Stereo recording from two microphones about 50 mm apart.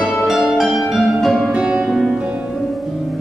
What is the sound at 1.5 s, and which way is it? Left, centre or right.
Music, centre.